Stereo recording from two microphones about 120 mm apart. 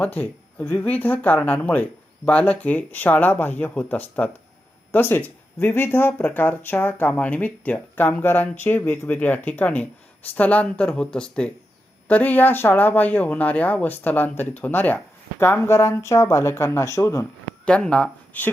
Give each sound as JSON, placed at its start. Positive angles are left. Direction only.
{"t": 0.0, "sound": "speech", "side_deg": 15}
{"t": 17.7, "sound": "speech", "side_deg": 10}